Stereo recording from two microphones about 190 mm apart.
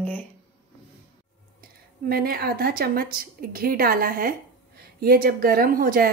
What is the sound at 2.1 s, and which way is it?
A woman's voice, 50° right (ahead or behind).